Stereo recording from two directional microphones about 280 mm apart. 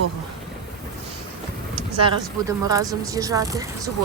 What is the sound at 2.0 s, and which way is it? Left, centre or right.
Speech, centre.